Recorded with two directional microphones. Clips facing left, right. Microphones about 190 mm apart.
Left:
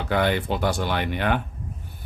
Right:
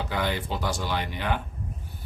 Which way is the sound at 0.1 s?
60° left (ahead or behind).